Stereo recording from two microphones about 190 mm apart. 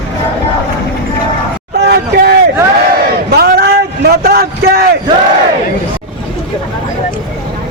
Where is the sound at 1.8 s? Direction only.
60° right (ahead or behind).